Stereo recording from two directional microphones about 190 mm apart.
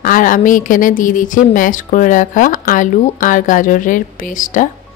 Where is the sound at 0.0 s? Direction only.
45° left (ahead or behind).